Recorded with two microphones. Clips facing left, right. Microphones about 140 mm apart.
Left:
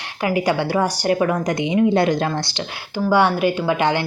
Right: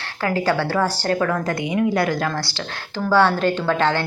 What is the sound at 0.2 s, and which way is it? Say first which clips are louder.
A woman's voice: left 1 dB; 15° left (ahead or behind).